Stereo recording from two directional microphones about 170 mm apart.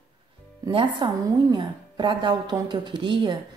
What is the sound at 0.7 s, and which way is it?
A woman's voice, 30° right (ahead or behind).